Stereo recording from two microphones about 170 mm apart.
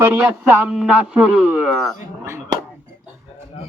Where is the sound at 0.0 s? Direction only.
15° right (ahead or behind).